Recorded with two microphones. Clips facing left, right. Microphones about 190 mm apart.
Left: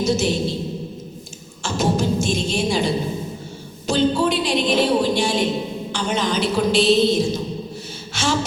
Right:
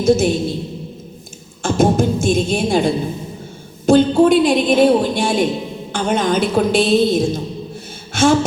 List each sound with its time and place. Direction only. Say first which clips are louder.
0.0 s a woman's voice: right 6 dB; 50° right (ahead or behind)
1.6 s a woman's voice: right 6 dB; 50° right (ahead or behind)
8.1 s a sound: right 9 dB; 50° right (ahead or behind)